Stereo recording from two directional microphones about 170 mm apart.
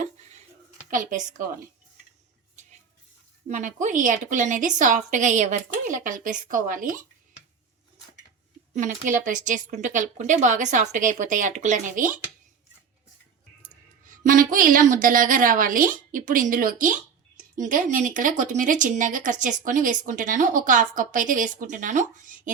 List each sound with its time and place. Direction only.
0.9 s a woman's voice: 50° right (ahead or behind)
3.5 s a woman's voice: 50° right (ahead or behind)
8.7 s a woman's voice: 50° right (ahead or behind)
14.1 s a woman's voice: 50° right (ahead or behind)